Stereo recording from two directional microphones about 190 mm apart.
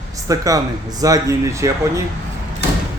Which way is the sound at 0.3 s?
20° right (ahead or behind).